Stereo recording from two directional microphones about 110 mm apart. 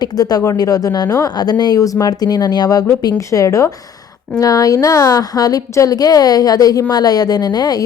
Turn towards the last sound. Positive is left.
turn(degrees=35)  # may be behind; listen again after turning